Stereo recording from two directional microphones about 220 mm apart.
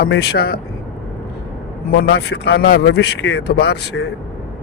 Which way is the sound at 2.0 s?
50° left (ahead or behind).